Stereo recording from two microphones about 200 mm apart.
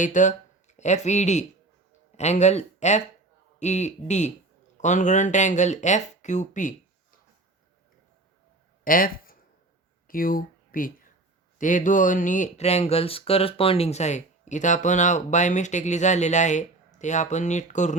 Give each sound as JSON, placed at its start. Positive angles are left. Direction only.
{"t": 0.0, "sound": "speech", "side_deg": 40}
{"t": 8.8, "sound": "a sound", "side_deg": 45}
{"t": 10.1, "sound": "speech", "side_deg": 45}